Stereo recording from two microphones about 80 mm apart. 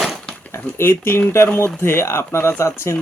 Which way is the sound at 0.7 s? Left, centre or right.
Left.